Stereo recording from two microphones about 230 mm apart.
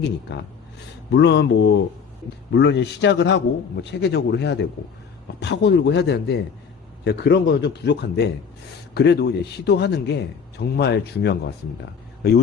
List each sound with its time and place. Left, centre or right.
0.3 s a man's voice: left